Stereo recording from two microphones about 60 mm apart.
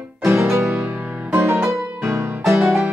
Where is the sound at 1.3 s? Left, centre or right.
Right.